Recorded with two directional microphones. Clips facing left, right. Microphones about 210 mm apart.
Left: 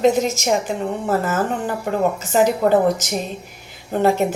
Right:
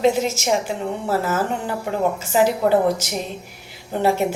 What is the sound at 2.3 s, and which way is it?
Speech, 45° left (ahead or behind).